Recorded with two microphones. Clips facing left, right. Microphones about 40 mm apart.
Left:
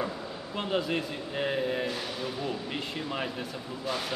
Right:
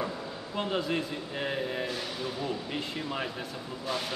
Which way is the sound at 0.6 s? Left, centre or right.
Centre.